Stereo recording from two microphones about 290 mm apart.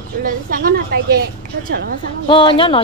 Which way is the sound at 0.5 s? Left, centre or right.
Right.